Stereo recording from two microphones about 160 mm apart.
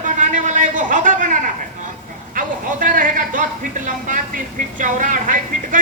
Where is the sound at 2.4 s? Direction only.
55° right (ahead or behind).